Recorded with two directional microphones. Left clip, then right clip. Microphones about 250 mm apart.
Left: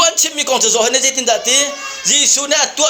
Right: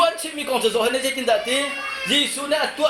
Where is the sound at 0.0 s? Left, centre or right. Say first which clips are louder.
Left 6 dB; left.